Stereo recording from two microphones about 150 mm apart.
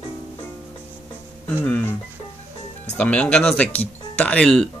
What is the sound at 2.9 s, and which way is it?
Speech, 10° left (ahead or behind).